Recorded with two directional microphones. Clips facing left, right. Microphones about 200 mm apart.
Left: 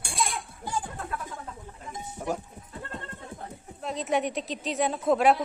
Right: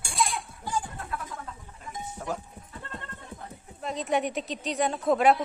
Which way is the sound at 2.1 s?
15° left (ahead or behind).